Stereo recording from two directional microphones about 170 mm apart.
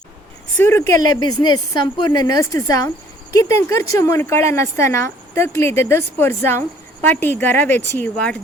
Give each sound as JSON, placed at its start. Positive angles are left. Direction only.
{"t": 0.6, "sound": "a woman's voice", "side_deg": 15}
{"t": 1.1, "sound": "a woman's voice", "side_deg": 25}